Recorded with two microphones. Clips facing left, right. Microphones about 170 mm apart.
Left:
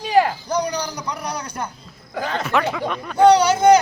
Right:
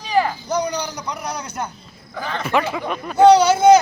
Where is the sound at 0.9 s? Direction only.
10° right (ahead or behind).